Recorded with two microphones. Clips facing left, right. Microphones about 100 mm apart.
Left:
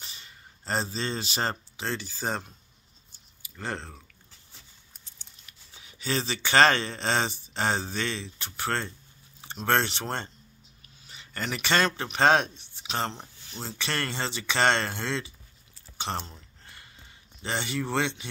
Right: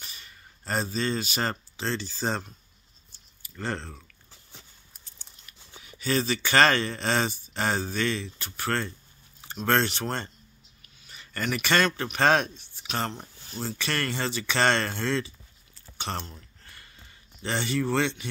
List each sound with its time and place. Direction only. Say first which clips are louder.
0.0 s a sound: even; 25° left (ahead or behind)
1.8 s speech: right 2 dB; 15° left (ahead or behind)
5.8 s speech: right 3 dB; 20° left (ahead or behind)
16.2 s speech: even; centre (ahead or behind)
17.4 s speech: right 3 dB; 15° left (ahead or behind)